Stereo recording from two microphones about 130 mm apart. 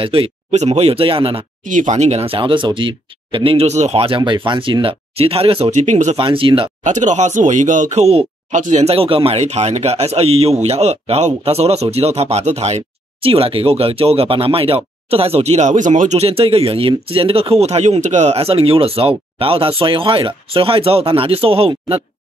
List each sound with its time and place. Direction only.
0.0 s speech: 45° right (ahead or behind)
1.7 s speech: 70° right (ahead or behind); by 5.7 s 45° right (ahead or behind)
5.7 s speech: 65° right (ahead or behind)
6.1 s speech: 45° right (ahead or behind)
6.8 s speech: 65° right (ahead or behind)
8.5 s speech: 70° right (ahead or behind); by 22.0 s 45° right (ahead or behind)